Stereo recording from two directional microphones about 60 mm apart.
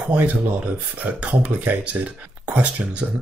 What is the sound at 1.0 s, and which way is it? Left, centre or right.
Speech, right.